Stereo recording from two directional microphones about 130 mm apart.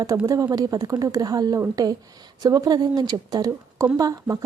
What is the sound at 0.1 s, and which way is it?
A woman's voice, 20° right (ahead or behind).